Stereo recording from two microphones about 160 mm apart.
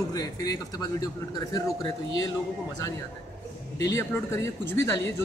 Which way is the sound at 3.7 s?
20° left (ahead or behind).